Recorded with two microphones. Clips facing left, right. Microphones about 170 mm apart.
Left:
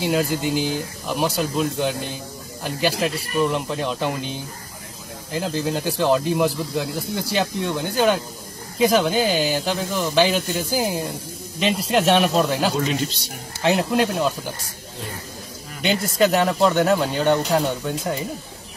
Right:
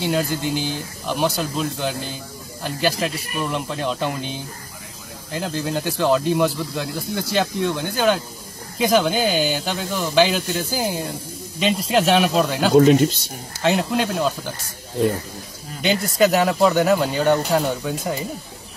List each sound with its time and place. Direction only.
0.0 s speech: centre (ahead or behind)
12.7 s speech: 50° right (ahead or behind)
13.6 s speech: centre (ahead or behind)
15.8 s speech: centre (ahead or behind)